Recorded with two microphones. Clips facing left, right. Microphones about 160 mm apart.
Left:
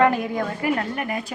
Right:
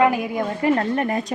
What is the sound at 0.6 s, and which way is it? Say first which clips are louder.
Speech: right 8 dB; 35° right (ahead or behind).